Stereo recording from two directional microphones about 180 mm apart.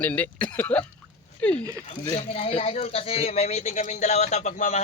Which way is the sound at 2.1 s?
30° left (ahead or behind).